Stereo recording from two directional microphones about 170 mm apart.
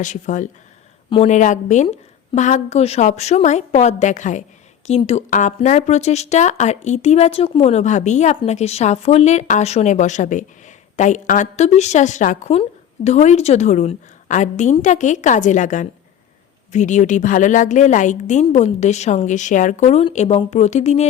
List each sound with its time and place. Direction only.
0.0 s a woman's voice: 45° left (ahead or behind)